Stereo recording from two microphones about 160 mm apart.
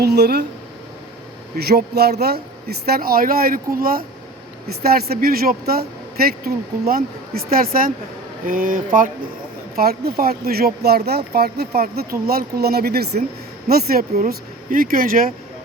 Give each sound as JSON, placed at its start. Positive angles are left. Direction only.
{"t": 0.0, "sound": "speech", "side_deg": -85}
{"t": 1.5, "sound": "speech", "side_deg": -80}
{"t": 9.7, "sound": "speech", "side_deg": -70}